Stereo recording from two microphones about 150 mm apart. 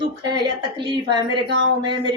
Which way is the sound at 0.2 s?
30° right (ahead or behind).